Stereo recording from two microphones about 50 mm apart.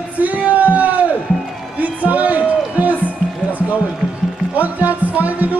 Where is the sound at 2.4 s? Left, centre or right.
Right.